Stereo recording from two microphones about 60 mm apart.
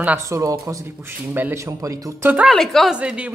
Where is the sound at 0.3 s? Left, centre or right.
Right.